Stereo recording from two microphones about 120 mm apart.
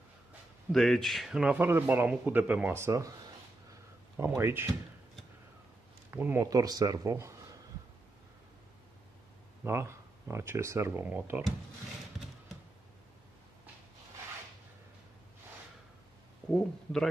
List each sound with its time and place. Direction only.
0.7 s a man's voice: 5° left (ahead or behind); by 3.2 s 25° right (ahead or behind)
4.4 s speech: 20° right (ahead or behind)
6.1 s a man's voice: 15° right (ahead or behind)
6.4 s speech: 30° right (ahead or behind)
9.7 s speech: 25° right (ahead or behind)
16.4 s a man's voice: 5° left (ahead or behind)